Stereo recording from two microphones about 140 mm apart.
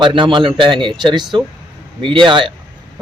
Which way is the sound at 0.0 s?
35° right (ahead or behind).